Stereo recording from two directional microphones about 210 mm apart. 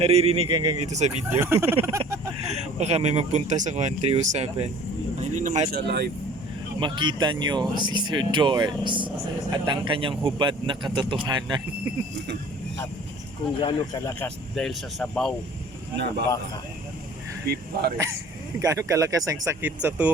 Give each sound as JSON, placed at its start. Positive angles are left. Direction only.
{"t": 0.0, "sound": "speech", "side_deg": -30}
{"t": 1.3, "sound": "speech", "side_deg": -10}
{"t": 2.4, "sound": "speech", "side_deg": -30}
{"t": 5.7, "sound": "speech", "side_deg": -50}
{"t": 6.7, "sound": "speech", "side_deg": -20}
{"t": 13.6, "sound": "speech", "side_deg": 25}
{"t": 17.4, "sound": "speech", "side_deg": -50}
{"t": 18.6, "sound": "speech", "side_deg": -15}